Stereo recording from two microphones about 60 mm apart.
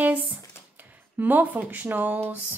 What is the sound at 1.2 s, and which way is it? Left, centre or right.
Speech, right.